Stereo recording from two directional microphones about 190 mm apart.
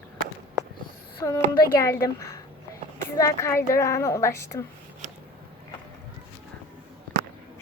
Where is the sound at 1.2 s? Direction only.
15° left (ahead or behind).